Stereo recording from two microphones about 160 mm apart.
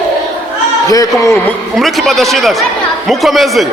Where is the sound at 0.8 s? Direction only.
20° left (ahead or behind).